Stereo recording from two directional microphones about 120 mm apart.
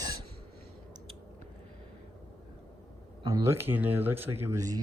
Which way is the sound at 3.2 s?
25° right (ahead or behind).